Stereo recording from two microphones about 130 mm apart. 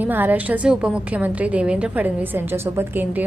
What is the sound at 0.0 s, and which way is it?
A woman's voice, 15° right (ahead or behind).